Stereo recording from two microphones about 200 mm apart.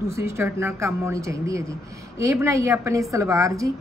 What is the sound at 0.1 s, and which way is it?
A woman's voice, 15° right (ahead or behind).